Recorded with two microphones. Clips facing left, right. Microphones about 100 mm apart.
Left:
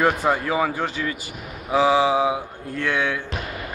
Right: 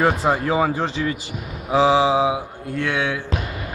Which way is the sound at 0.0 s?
20° right (ahead or behind).